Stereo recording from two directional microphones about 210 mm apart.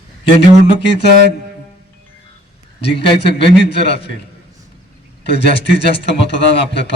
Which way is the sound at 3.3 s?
55° left (ahead or behind).